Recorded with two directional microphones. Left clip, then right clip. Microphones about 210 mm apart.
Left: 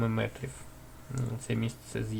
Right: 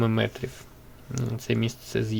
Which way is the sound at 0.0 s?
35° right (ahead or behind).